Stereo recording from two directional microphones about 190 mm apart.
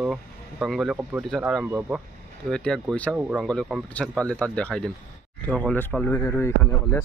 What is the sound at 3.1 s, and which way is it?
Speech, 5° right (ahead or behind).